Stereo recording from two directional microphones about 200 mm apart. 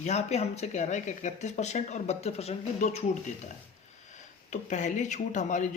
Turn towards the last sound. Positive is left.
turn(degrees=40)  # may be behind; listen again after turning